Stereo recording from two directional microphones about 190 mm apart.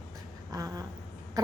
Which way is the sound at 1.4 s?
20° right (ahead or behind).